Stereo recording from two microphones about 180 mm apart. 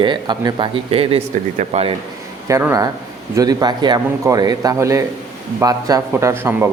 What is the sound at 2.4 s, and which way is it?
A man's voice, 15° right (ahead or behind).